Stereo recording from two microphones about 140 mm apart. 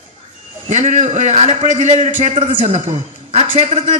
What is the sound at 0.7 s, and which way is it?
A woman's voice, 55° right (ahead or behind).